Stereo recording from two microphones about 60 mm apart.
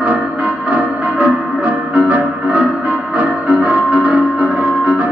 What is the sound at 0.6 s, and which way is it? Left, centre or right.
Music, right.